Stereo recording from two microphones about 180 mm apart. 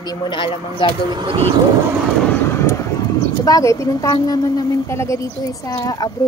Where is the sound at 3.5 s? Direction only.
20° left (ahead or behind).